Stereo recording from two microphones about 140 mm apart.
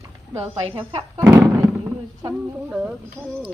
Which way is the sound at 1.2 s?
20° right (ahead or behind).